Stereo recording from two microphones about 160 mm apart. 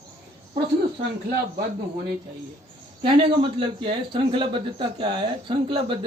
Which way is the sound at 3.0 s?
30° right (ahead or behind).